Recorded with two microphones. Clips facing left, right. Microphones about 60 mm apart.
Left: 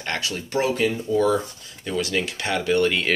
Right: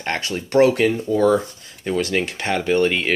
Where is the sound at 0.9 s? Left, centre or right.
Right.